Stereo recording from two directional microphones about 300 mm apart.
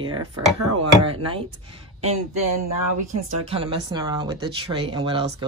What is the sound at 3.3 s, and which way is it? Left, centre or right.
Speech, centre.